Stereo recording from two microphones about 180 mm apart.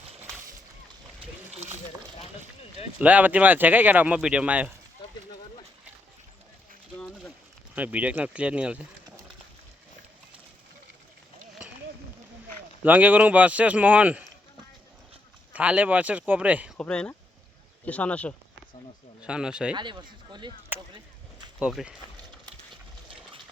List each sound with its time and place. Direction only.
3.0 s speech: 10° right (ahead or behind)
5.0 s a sound: 25° left (ahead or behind)
7.0 s a sound: centre (ahead or behind)
7.8 s speech: 10° right (ahead or behind)
12.8 s speech: 10° right (ahead or behind)
15.5 s speech: 5° right (ahead or behind)
16.7 s speech: 5° left (ahead or behind)
19.2 s speech: 5° right (ahead or behind)
19.7 s speech: 25° right (ahead or behind)
20.7 s a sound: 25° right (ahead or behind)
21.6 s speech: 5° right (ahead or behind)
22.7 s a sound: 30° right (ahead or behind)